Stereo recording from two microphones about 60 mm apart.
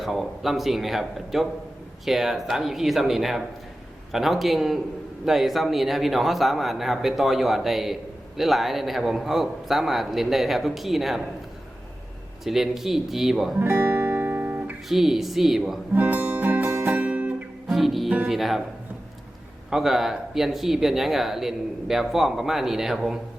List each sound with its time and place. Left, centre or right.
0.0 s speech: centre
12.5 s speech: centre
13.6 s guitar: right
14.8 s speech: centre
16.0 s music: right
17.7 s music: centre
18.3 s speech: centre
19.7 s speech: centre